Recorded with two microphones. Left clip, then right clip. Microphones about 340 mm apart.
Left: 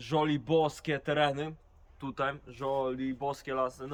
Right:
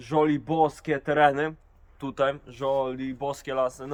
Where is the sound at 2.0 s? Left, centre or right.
Right.